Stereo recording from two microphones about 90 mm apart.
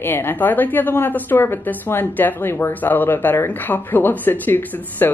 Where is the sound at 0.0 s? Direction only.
25° left (ahead or behind).